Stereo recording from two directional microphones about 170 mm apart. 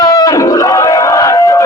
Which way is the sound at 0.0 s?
20° left (ahead or behind).